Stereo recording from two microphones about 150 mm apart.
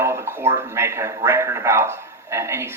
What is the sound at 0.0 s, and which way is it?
Speech, 15° right (ahead or behind).